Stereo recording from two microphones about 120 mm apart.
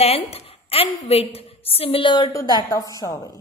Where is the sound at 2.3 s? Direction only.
30° left (ahead or behind).